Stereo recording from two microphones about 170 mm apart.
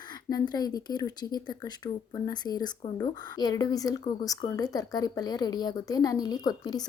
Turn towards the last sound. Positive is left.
turn(degrees=25)  # may be behind; listen again after turning